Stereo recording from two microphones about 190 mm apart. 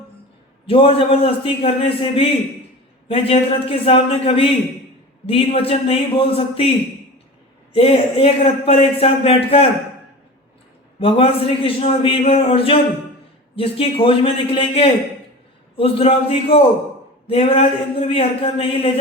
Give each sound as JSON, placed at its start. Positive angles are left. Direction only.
{"t": 0.7, "sound": "a man's voice", "side_deg": 30}
{"t": 7.7, "sound": "speech", "side_deg": 30}
{"t": 11.0, "sound": "a man's voice", "side_deg": 30}